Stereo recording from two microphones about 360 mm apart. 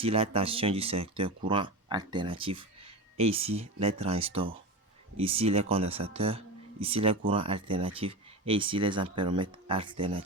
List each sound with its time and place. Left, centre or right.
0.0 s speech: centre